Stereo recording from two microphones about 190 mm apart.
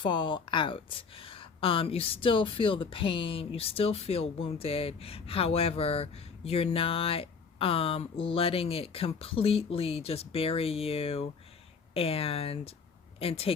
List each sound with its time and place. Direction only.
0.0 s speech: 25° left (ahead or behind)